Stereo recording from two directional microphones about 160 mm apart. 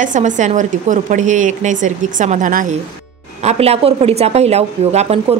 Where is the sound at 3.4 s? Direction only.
40° right (ahead or behind).